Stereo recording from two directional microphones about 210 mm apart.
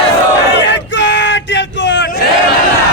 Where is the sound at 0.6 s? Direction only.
55° left (ahead or behind).